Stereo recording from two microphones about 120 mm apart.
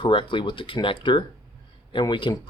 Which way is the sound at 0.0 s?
45° left (ahead or behind).